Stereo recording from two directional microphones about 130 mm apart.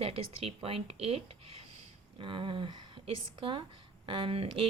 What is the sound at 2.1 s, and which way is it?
Speech, 40° right (ahead or behind).